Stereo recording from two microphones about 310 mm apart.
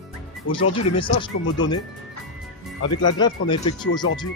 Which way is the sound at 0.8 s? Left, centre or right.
Centre.